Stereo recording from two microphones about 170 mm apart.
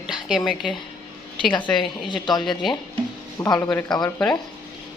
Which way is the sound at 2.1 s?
25° left (ahead or behind).